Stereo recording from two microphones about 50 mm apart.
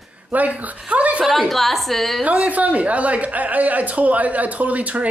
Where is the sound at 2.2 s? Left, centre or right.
Right.